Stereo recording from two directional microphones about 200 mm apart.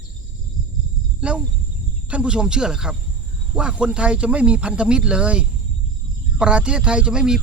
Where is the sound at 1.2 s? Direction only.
5° right (ahead or behind).